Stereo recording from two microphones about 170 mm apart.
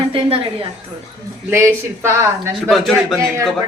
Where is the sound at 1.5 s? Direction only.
15° right (ahead or behind).